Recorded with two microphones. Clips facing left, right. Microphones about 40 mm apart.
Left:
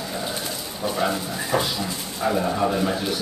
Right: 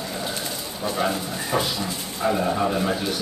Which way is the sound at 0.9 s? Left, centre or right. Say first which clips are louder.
Even; centre.